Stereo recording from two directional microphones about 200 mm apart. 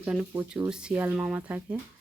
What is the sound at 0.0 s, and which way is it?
Speech, 5° right (ahead or behind).